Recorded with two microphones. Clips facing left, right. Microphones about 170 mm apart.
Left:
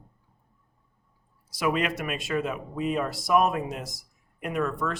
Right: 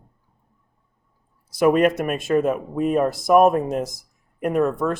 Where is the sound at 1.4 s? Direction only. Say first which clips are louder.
Right 10 dB; 50° right (ahead or behind).